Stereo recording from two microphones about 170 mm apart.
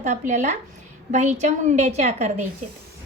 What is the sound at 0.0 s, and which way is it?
A woman's voice, 45° right (ahead or behind).